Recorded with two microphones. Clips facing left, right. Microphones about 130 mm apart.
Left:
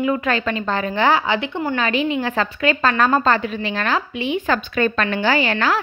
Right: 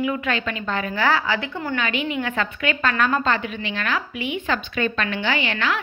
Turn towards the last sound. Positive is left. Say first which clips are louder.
# left 5 dB
turn(degrees=40)  # may be behind; listen again after turning